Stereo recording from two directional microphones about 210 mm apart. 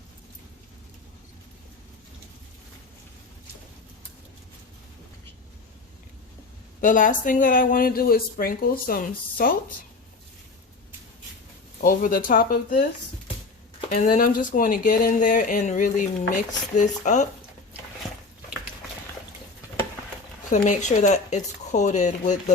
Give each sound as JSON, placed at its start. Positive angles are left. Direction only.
{"t": 6.8, "sound": "speech", "side_deg": 40}
{"t": 11.8, "sound": "speech", "side_deg": 40}
{"t": 13.9, "sound": "speech", "side_deg": 40}
{"t": 20.5, "sound": "speech", "side_deg": 35}